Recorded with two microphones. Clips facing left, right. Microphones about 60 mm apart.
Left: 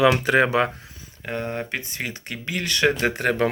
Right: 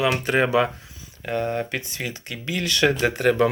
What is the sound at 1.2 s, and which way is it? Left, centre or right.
Speech, left.